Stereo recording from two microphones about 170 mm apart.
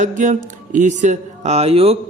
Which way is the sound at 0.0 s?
45° right (ahead or behind).